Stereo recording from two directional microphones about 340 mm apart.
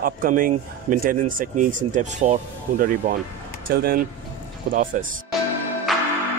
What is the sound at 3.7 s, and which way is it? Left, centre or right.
Speech, right.